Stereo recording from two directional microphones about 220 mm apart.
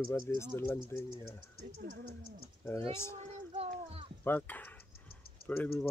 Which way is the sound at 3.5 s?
25° right (ahead or behind).